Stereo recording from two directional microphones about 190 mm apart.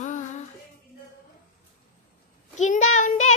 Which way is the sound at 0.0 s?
40° left (ahead or behind).